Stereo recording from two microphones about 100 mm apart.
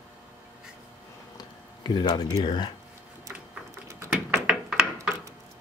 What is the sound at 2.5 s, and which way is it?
Speech, 50° left (ahead or behind).